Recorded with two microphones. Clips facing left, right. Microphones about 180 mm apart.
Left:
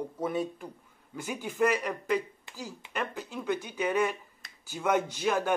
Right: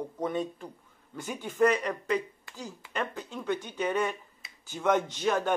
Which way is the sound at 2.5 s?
20° left (ahead or behind).